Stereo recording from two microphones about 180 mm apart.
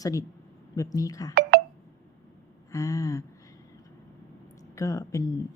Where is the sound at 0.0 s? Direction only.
20° left (ahead or behind).